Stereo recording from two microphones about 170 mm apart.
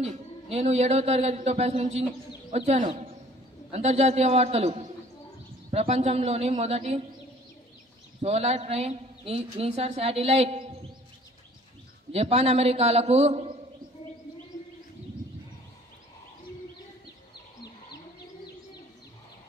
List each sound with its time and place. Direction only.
0.0 s a woman's voice: 40° right (ahead or behind)
8.2 s a woman's voice: 40° right (ahead or behind)
12.1 s a woman's voice: 35° right (ahead or behind)